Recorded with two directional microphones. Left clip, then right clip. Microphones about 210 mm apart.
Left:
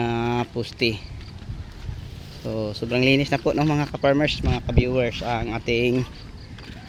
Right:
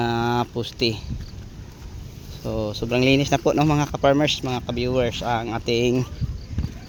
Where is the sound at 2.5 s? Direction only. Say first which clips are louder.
Right 1 dB; centre (ahead or behind).